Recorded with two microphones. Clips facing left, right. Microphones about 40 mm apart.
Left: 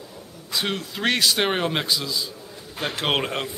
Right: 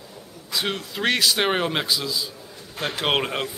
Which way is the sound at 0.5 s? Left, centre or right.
Centre.